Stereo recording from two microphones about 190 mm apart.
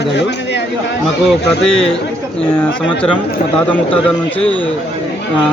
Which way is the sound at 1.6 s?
5° left (ahead or behind).